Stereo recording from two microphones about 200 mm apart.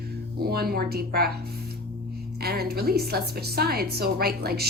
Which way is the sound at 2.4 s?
50° right (ahead or behind).